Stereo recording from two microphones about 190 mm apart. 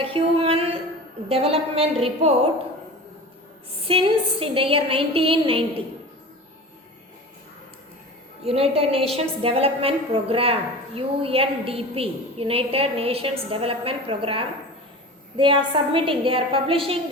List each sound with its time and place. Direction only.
0.0 s a sound: 30° right (ahead or behind)
1.3 s a woman's voice: 30° right (ahead or behind)
3.8 s a woman's voice: 30° right (ahead or behind)
8.4 s a woman's voice: 30° right (ahead or behind)